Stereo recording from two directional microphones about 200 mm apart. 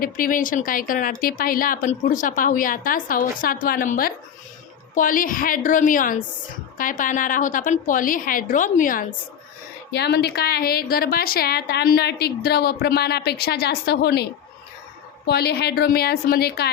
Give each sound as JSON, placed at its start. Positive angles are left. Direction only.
{"t": 0.0, "sound": "a woman's voice", "side_deg": 45}
{"t": 9.9, "sound": "a woman's voice", "side_deg": 55}
{"t": 15.3, "sound": "a woman's voice", "side_deg": 55}